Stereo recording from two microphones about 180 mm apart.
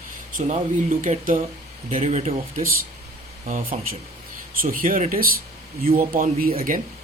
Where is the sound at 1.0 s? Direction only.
45° right (ahead or behind).